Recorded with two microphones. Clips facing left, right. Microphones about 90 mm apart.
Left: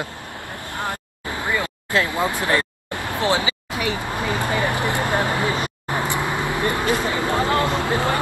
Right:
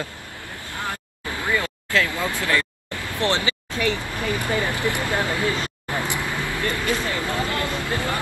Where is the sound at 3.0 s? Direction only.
20° left (ahead or behind).